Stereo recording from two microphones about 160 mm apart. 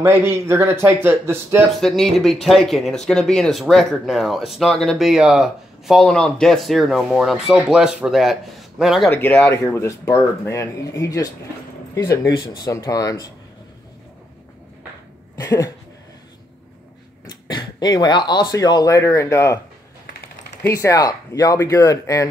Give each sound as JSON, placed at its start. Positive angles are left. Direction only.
{"t": 0.0, "sound": "speech", "side_deg": -15}
{"t": 1.8, "sound": "speech", "side_deg": 0}
{"t": 9.1, "sound": "speech", "side_deg": 15}
{"t": 15.3, "sound": "speech", "side_deg": 25}
{"t": 17.3, "sound": "speech", "side_deg": 25}
{"t": 20.6, "sound": "speech", "side_deg": 20}